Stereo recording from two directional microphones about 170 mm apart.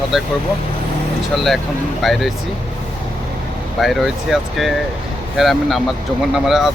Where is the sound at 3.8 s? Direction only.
Centre (ahead or behind).